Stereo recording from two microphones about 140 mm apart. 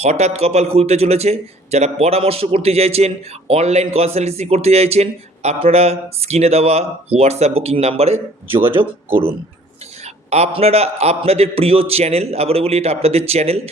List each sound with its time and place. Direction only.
0.0 s a man's voice: 50° right (ahead or behind)
8.6 s speech: 15° right (ahead or behind)
10.2 s a man's voice: 50° right (ahead or behind)